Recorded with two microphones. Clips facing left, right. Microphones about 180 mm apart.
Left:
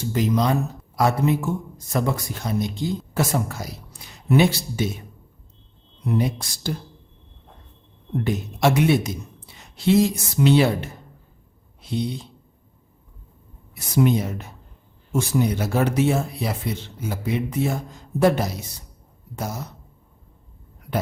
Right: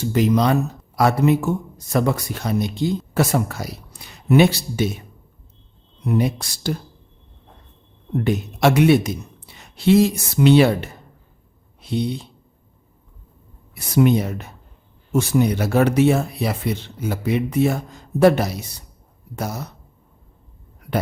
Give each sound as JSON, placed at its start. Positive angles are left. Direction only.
{"t": 0.1, "sound": "speech", "side_deg": -70}
{"t": 6.1, "sound": "speech", "side_deg": -70}
{"t": 8.2, "sound": "speech", "side_deg": -70}
{"t": 13.7, "sound": "speech", "side_deg": -65}